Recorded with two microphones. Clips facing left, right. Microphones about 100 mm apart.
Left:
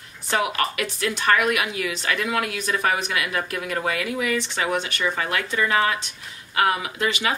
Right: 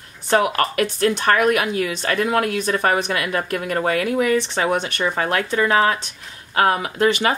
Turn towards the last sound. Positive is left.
turn(degrees=-45)  # may be behind; listen again after turning